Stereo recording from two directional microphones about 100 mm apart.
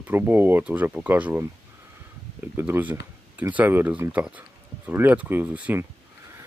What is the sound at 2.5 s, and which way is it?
Speech, 20° right (ahead or behind).